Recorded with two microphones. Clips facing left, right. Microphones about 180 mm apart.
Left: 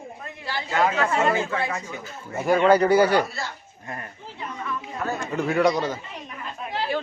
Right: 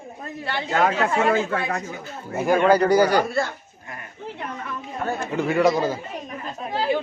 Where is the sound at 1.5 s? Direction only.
55° right (ahead or behind).